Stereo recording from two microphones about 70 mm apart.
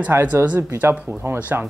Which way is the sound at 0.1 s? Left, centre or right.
Right.